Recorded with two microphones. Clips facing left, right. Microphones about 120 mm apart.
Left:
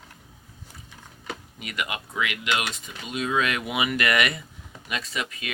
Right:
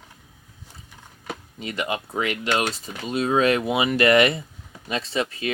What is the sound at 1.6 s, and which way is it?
Speech, 30° right (ahead or behind).